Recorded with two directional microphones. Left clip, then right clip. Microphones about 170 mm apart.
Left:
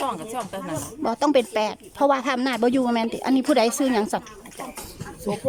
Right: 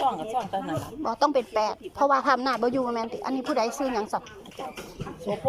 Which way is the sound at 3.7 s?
30° left (ahead or behind).